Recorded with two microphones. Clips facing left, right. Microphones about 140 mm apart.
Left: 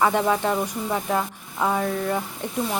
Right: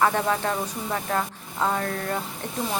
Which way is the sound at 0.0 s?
15° left (ahead or behind).